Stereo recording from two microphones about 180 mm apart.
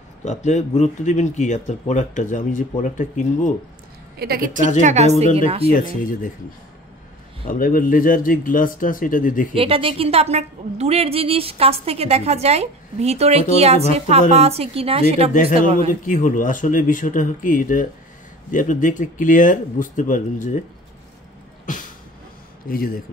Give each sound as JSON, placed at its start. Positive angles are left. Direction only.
{"t": 0.2, "sound": "speech", "side_deg": 40}
{"t": 4.2, "sound": "a woman's voice", "side_deg": -55}
{"t": 4.8, "sound": "a woman's voice", "side_deg": -40}
{"t": 5.7, "sound": "speech", "side_deg": 50}
{"t": 7.4, "sound": "speech", "side_deg": 50}
{"t": 9.6, "sound": "a woman's voice", "side_deg": -30}
{"t": 15.9, "sound": "speech", "side_deg": 45}
{"t": 21.7, "sound": "speech", "side_deg": 45}